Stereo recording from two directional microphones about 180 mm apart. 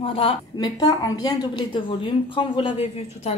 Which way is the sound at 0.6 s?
25° left (ahead or behind).